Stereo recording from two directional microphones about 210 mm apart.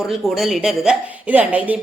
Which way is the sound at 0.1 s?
Centre (ahead or behind).